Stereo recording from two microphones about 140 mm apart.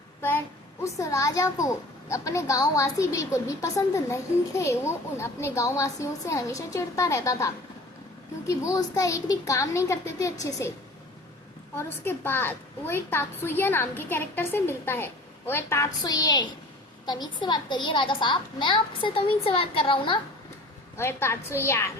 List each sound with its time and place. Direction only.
0.2 s a sound: 15° left (ahead or behind)
0.9 s a child's voice: 20° left (ahead or behind)
11.8 s a woman's voice: 15° left (ahead or behind); by 20.1 s 40° left (ahead or behind)
20.9 s a child's voice: 15° left (ahead or behind)